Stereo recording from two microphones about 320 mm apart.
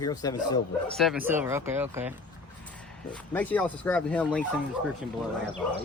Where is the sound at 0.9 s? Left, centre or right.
Centre.